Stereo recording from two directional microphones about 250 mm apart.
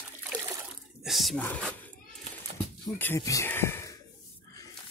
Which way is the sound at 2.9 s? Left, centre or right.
Centre.